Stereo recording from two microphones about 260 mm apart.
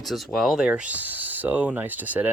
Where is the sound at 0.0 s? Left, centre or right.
Centre.